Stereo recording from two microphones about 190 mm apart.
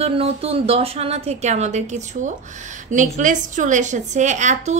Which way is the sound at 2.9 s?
40° right (ahead or behind).